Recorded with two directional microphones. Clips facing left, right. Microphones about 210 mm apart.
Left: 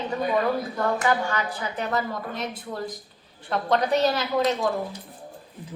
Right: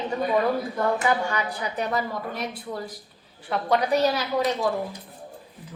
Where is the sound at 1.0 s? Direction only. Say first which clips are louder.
Even; 15° right (ahead or behind).